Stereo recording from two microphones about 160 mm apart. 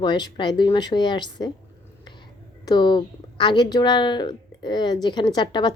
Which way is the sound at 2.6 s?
25° left (ahead or behind).